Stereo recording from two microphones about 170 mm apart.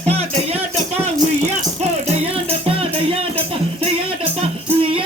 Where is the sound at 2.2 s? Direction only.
35° right (ahead or behind).